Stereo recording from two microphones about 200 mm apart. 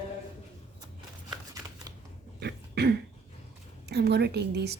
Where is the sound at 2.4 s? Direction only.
55° right (ahead or behind).